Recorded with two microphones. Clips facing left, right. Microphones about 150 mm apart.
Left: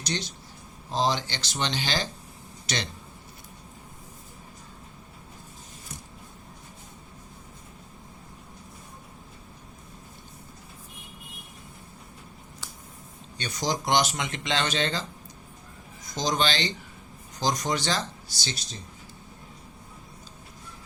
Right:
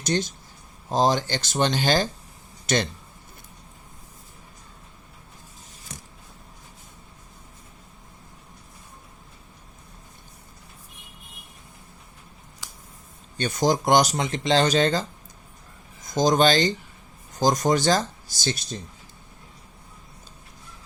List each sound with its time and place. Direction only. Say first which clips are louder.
0.0 s speech: right 7 dB; 45° right (ahead or behind)
13.3 s speech: right 7 dB; 50° right (ahead or behind)
16.0 s speech: right 8 dB; 50° right (ahead or behind)